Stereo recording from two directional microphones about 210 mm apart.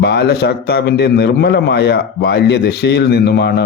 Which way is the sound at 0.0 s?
50° left (ahead or behind).